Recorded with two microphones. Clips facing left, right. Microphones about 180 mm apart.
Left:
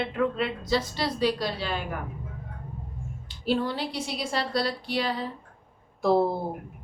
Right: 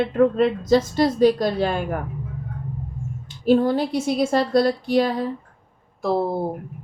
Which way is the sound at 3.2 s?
45° right (ahead or behind).